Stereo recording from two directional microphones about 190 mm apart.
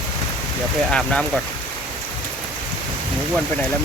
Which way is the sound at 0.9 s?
5° left (ahead or behind).